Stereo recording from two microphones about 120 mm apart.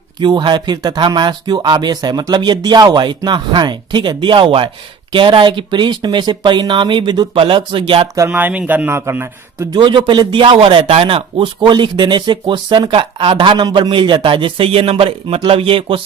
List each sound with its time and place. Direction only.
0.2 s speech: 40° right (ahead or behind)
8.3 s speech: 15° right (ahead or behind)
9.7 s speech: 40° right (ahead or behind)